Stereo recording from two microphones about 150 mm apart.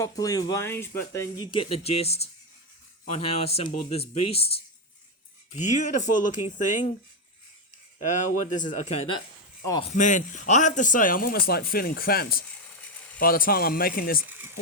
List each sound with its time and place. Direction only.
0.0 s speech: 25° left (ahead or behind)
1.5 s speech: 40° left (ahead or behind)
3.7 s speech: 55° left (ahead or behind)
5.5 s speech: 55° left (ahead or behind)
8.4 s a man's voice: 55° left (ahead or behind); by 12.5 s 85° left
13.1 s a man's voice: 75° left (ahead or behind)
14.3 s a sound: 15° right (ahead or behind)